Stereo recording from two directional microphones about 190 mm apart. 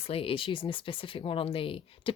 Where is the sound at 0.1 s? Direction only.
30° left (ahead or behind).